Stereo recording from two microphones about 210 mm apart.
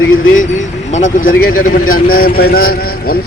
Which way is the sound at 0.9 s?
40° left (ahead or behind).